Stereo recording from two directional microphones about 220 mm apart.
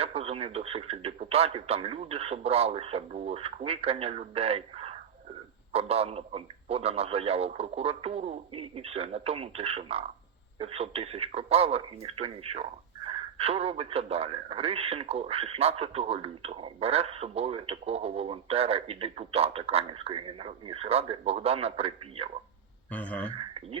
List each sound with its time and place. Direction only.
0.0 s speech: 25° right (ahead or behind)
22.9 s speech: 5° left (ahead or behind)